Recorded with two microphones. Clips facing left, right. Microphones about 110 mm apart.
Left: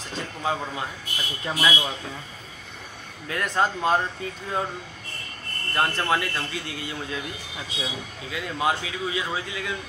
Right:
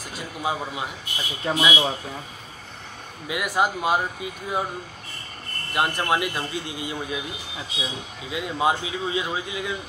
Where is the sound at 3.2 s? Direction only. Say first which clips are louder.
Right 1 dB; 10° right (ahead or behind).